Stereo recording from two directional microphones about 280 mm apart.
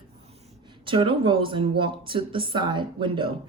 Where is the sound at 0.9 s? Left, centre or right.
Centre.